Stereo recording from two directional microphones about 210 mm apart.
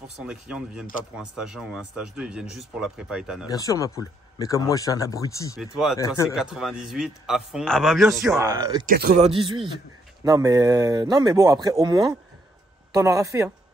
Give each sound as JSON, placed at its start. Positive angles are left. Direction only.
{"t": 0.2, "sound": "speech", "side_deg": -5}
{"t": 3.4, "sound": "speech", "side_deg": 15}
{"t": 5.6, "sound": "speech", "side_deg": 0}
{"t": 8.4, "sound": "speech", "side_deg": -15}
{"t": 8.8, "sound": "speech", "side_deg": -50}
{"t": 9.2, "sound": "a man's voice", "side_deg": -25}